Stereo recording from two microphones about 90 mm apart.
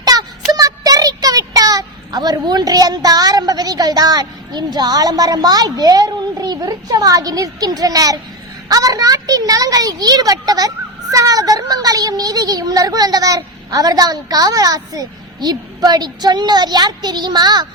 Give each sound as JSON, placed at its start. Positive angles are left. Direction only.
{"t": 0.0, "sound": "child singing", "side_deg": -45}
{"t": 8.7, "sound": "speech", "side_deg": -40}